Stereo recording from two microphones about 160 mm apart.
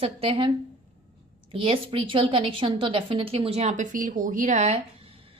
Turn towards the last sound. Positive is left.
turn(degrees=-45)  # may be behind; listen again after turning